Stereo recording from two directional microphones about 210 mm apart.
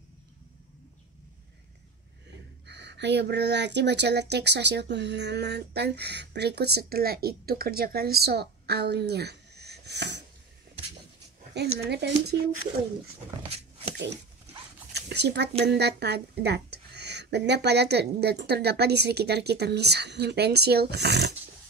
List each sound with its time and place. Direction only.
2.6 s speech: 55° right (ahead or behind)
11.8 s speech: 50° right (ahead or behind)
13.4 s a sound: 25° right (ahead or behind)
15.0 s speech: 55° right (ahead or behind)